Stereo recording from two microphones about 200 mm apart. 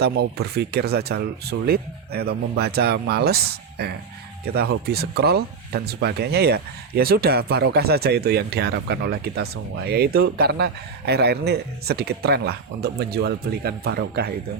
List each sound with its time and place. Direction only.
0.0 s speech: 55° right (ahead or behind)